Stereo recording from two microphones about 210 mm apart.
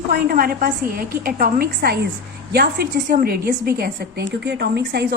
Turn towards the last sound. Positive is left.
turn(degrees=-50)  # may be behind; listen again after turning